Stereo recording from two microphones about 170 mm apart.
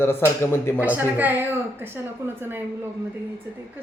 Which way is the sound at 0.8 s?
10° right (ahead or behind).